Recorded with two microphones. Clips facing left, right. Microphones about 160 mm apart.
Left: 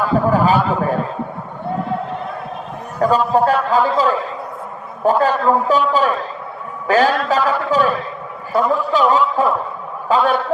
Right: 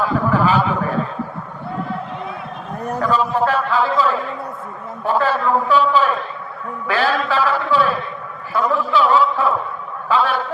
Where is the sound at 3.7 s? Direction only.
40° left (ahead or behind).